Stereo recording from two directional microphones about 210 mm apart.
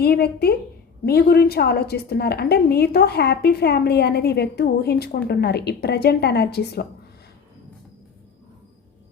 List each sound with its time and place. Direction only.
0.0 s a woman's voice: 50° left (ahead or behind)